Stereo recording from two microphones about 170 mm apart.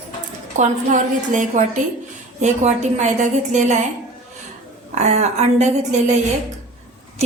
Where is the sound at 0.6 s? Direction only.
50° right (ahead or behind).